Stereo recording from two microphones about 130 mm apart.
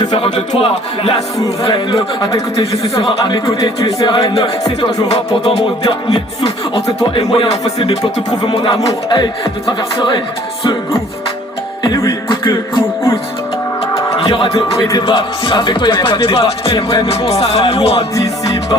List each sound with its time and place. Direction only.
0.6 s speech: 45° left (ahead or behind)
1.6 s music: 40° left (ahead or behind)
11.8 s music: 30° left (ahead or behind)
13.9 s music: 40° left (ahead or behind)
14.8 s speech: 30° left (ahead or behind); by 18.0 s 50° left (ahead or behind)
18.1 s music: 30° left (ahead or behind)